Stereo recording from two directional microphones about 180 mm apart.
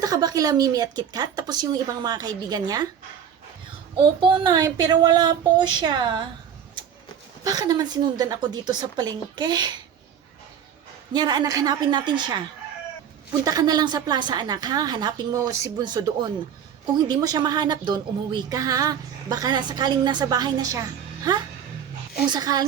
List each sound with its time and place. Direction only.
0.0 s a woman's voice: 20° right (ahead or behind)
4.2 s a woman's voice: 25° right (ahead or behind)
7.4 s a woman's voice: 20° right (ahead or behind)
11.1 s a woman's voice: 25° right (ahead or behind)
13.4 s a woman's voice: 20° right (ahead or behind)